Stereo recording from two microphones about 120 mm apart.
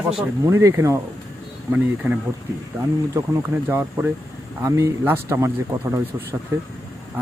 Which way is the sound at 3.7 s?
15° right (ahead or behind).